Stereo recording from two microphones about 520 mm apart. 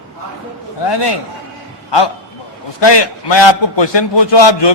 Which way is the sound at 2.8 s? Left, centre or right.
Left.